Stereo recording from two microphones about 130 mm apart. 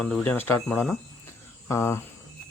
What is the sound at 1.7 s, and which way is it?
Cricket, 20° left (ahead or behind).